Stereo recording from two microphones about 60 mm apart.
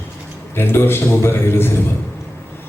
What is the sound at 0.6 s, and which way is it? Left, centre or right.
A man's voice, left.